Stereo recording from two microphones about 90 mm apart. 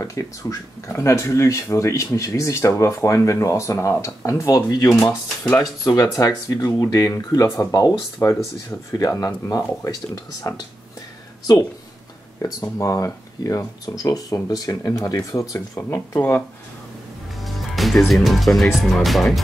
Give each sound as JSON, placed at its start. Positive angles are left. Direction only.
{"t": 0.0, "sound": "speech", "side_deg": 35}
{"t": 12.7, "sound": "speech", "side_deg": 35}
{"t": 15.8, "sound": "speech", "side_deg": 25}
{"t": 17.5, "sound": "speech", "side_deg": 0}